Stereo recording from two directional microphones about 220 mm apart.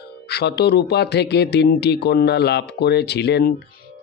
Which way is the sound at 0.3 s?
50° left (ahead or behind).